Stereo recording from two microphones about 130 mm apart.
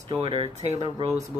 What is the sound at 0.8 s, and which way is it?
Speech, 50° right (ahead or behind).